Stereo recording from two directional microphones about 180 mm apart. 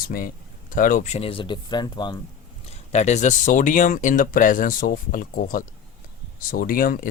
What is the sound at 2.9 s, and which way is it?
Speech, 40° left (ahead or behind).